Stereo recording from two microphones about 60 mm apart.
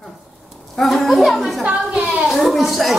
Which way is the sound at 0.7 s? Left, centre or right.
Centre.